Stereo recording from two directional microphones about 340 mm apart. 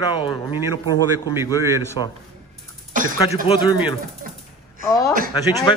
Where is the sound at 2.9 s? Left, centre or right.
Right.